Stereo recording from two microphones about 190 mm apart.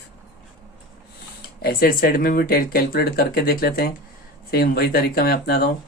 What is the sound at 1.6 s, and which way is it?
Speech, 50° left (ahead or behind).